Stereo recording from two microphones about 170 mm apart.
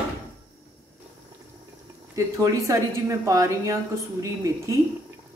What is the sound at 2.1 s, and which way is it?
A woman's voice, 20° right (ahead or behind).